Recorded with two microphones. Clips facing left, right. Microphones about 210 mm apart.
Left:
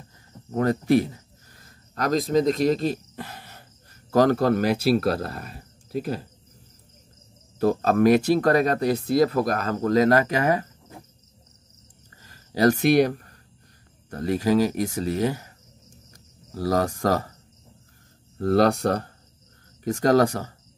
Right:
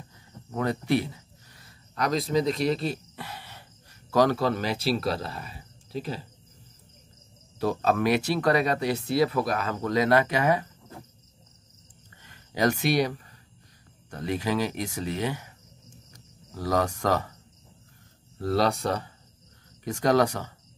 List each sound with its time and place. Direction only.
0.5 s a sound: 45° left (ahead or behind)
4.1 s speech: 45° left (ahead or behind)
7.5 s speech: 45° left (ahead or behind)
12.2 s a sound: 40° left (ahead or behind)
13.0 s speech: 55° left (ahead or behind)
14.1 s speech: 40° left (ahead or behind)
16.5 s speech: 40° left (ahead or behind)
18.4 s speech: 55° left (ahead or behind)
19.8 s speech: 45° left (ahead or behind)